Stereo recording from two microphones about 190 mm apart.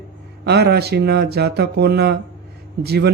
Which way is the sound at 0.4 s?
60° right (ahead or behind).